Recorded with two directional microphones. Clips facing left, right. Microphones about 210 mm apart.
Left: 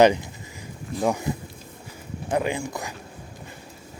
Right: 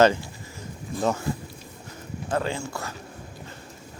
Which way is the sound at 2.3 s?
15° left (ahead or behind).